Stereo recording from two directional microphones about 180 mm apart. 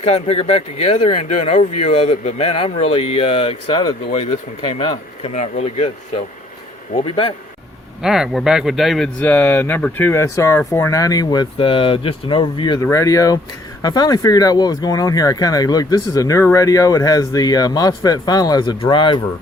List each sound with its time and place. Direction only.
0.0 s speech: 35° left (ahead or behind)
6.9 s speech: 30° left (ahead or behind)
8.0 s speech: centre (ahead or behind); by 19.2 s 25° left (ahead or behind)